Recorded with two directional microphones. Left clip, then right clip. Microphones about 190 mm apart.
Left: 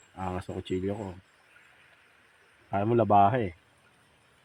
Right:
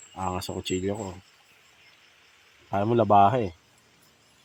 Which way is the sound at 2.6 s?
15° right (ahead or behind).